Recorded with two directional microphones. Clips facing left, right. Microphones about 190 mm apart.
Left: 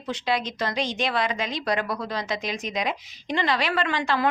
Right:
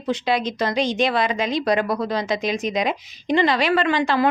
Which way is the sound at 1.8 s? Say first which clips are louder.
Right 7 dB; 40° right (ahead or behind).